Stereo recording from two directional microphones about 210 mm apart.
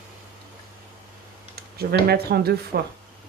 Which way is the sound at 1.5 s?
50° right (ahead or behind).